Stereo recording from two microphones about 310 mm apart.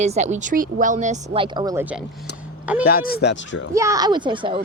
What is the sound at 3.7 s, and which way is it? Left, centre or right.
Speech, centre.